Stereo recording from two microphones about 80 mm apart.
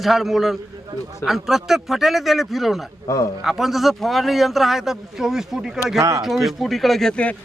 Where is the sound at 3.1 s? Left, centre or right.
Left.